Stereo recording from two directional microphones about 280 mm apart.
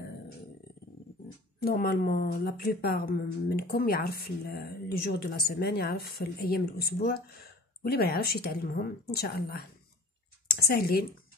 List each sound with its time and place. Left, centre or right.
1.6 s speech: left